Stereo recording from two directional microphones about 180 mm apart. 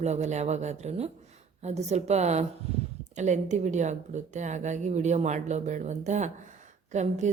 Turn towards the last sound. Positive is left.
turn(degrees=-40)  # may be behind; listen again after turning